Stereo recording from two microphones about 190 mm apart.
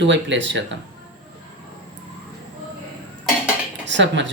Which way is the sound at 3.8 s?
70° right (ahead or behind).